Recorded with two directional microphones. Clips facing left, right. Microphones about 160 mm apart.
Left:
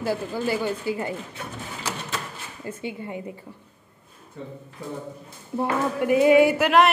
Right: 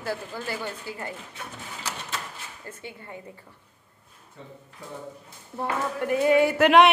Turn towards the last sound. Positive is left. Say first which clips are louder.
# left 1 dB
turn(degrees=5)  # may be behind; listen again after turning